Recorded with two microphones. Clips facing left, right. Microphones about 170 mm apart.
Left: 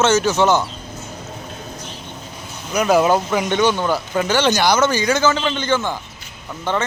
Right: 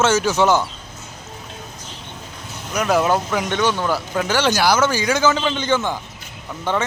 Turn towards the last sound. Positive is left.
turn(degrees=-10)  # may be behind; listen again after turning